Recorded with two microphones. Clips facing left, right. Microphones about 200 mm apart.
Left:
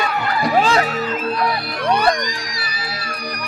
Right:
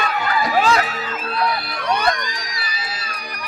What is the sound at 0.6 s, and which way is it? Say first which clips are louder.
Music: left 1 dB; 30° left (ahead or behind).